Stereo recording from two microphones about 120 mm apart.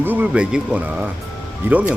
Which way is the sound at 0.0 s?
15° right (ahead or behind).